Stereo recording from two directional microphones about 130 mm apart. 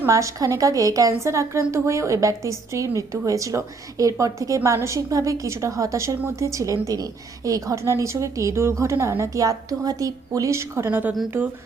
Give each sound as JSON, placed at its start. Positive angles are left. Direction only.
{"t": 0.0, "sound": "a woman's voice", "side_deg": -25}